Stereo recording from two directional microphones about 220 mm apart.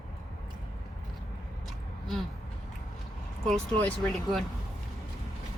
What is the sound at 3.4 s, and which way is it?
A woman's voice, 5° left (ahead or behind).